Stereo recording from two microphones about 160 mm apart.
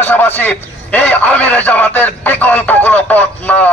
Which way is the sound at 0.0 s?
10° left (ahead or behind).